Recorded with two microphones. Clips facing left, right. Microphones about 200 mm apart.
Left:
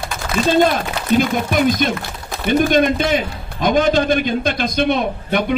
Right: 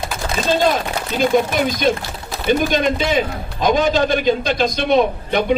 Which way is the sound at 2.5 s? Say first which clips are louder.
Left 2 dB; 55° left (ahead or behind).